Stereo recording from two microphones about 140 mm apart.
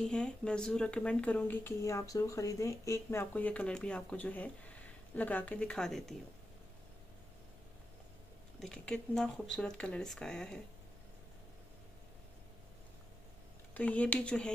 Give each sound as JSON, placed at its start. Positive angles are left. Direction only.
{"t": 0.0, "sound": "speech", "side_deg": 5}
{"t": 8.5, "sound": "speech", "side_deg": 5}
{"t": 13.7, "sound": "speech", "side_deg": 10}